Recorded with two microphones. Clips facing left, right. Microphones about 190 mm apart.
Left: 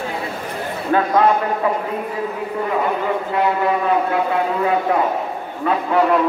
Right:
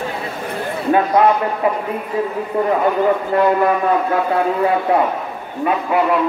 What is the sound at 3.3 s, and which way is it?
Speech, 45° right (ahead or behind).